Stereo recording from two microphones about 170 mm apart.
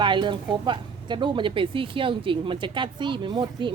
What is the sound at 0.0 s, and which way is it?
Speech, 25° right (ahead or behind).